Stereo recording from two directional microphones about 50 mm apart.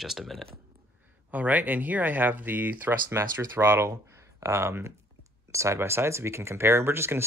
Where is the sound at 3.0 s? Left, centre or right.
Right.